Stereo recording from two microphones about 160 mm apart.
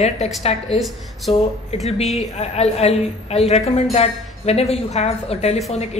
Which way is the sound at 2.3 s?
40° left (ahead or behind).